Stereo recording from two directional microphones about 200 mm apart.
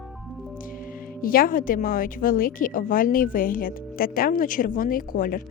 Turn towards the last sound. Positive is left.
turn(degrees=45)  # may be behind; listen again after turning